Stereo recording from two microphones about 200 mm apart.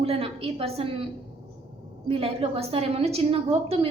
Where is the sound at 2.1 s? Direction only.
25° right (ahead or behind).